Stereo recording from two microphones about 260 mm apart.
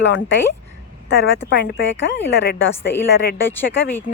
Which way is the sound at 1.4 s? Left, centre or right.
Left.